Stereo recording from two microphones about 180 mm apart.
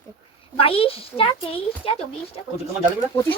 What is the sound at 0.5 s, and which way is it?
Speech, 30° left (ahead or behind).